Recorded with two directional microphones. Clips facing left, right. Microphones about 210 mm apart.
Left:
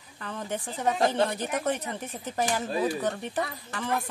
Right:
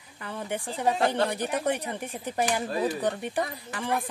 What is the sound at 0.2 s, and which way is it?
Speech, 10° right (ahead or behind).